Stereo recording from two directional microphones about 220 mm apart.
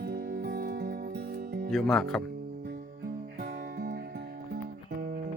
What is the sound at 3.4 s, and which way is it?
Music, 45° right (ahead or behind).